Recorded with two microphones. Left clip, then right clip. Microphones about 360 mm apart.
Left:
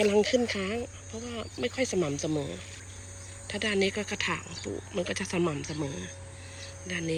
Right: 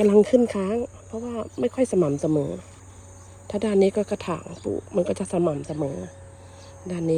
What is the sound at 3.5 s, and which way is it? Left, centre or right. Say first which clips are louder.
Speech: right 7 dB; centre.